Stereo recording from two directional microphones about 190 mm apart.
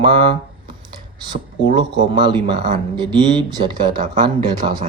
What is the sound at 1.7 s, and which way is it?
Speech, 25° right (ahead or behind).